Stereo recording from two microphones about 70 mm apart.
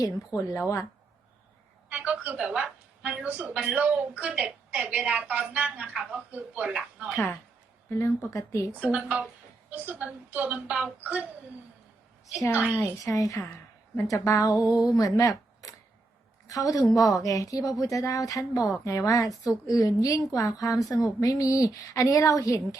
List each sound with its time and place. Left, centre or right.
0.3 s speech: left
1.9 s telephone: right
2.4 s a woman's voice: centre
7.9 s speech: left
8.8 s a woman's voice: centre
12.5 s a woman's voice: centre
12.8 s speech: left